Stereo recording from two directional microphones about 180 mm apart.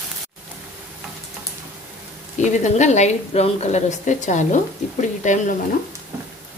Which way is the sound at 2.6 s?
40° left (ahead or behind).